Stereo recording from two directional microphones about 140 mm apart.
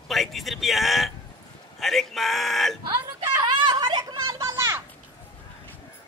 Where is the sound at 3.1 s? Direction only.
30° right (ahead or behind).